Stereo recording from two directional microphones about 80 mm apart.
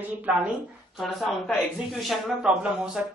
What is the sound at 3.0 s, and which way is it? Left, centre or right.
Speech, centre.